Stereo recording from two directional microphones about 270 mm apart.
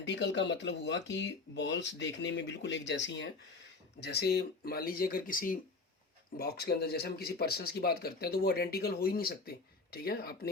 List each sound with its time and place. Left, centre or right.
0.0 s speech: left